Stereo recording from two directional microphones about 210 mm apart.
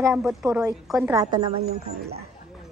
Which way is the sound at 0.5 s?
15° right (ahead or behind).